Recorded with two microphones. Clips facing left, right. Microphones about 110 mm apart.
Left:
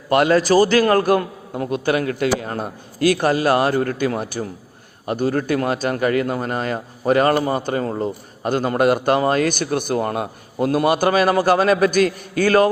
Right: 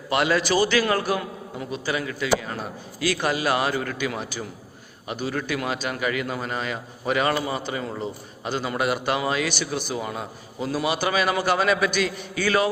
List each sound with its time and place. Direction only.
0.1 s a man's voice: 50° left (ahead or behind)